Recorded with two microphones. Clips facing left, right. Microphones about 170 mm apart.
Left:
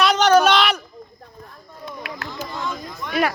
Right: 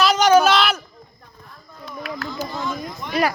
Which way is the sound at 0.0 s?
5° right (ahead or behind).